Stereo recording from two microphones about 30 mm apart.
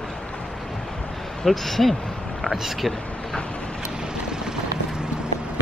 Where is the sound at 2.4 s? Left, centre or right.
Centre.